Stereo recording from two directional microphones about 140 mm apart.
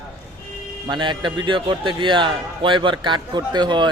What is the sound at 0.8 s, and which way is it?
Speech, 35° right (ahead or behind).